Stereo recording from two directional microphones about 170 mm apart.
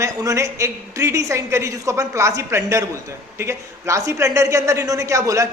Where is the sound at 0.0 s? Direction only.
20° right (ahead or behind).